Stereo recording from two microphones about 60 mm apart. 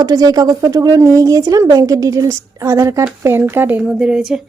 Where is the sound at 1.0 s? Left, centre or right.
Right.